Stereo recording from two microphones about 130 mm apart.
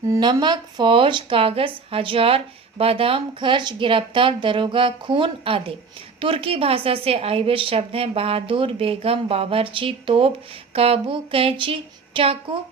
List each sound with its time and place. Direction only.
0.1 s a woman's voice: 30° right (ahead or behind)